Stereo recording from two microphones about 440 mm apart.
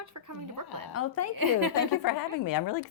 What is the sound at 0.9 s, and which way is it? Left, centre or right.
Speech, left.